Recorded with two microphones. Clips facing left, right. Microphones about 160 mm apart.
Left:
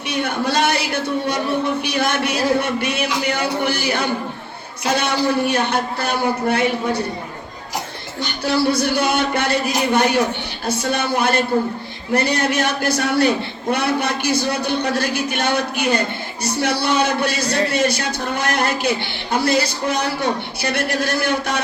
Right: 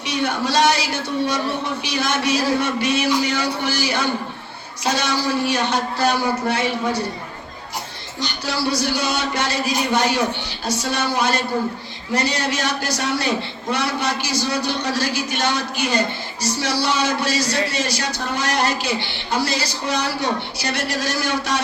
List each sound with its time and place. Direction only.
0.1 s a sound: 55° left (ahead or behind)
1.8 s a man's voice: 55° left (ahead or behind)
8.2 s a man's voice: 55° left (ahead or behind)